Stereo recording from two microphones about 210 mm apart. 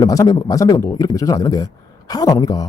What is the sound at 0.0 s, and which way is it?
A man's voice, 15° left (ahead or behind).